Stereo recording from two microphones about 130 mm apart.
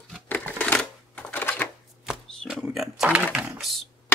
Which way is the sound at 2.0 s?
5° right (ahead or behind).